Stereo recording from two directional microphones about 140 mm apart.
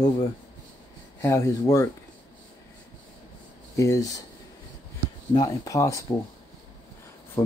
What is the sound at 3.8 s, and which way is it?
Speech, 20° left (ahead or behind).